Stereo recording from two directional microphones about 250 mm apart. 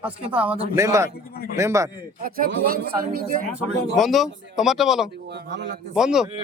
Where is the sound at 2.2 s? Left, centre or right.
Right.